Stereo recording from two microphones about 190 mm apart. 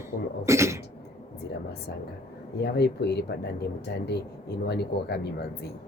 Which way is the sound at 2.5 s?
60° left (ahead or behind).